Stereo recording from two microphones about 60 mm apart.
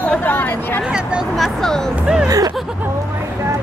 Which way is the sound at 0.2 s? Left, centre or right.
Left.